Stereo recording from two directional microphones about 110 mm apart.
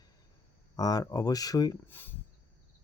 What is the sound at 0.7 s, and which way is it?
Speech, 35° left (ahead or behind).